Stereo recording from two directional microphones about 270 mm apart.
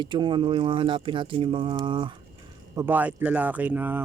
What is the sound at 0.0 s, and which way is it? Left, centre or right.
Speech, centre.